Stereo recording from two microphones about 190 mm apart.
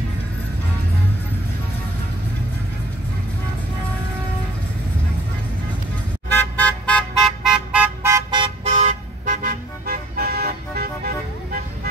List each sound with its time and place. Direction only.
6.3 s vehicle: 10° left (ahead or behind); by 8.5 s 20° right (ahead or behind)
8.6 s toot: 35° right (ahead or behind)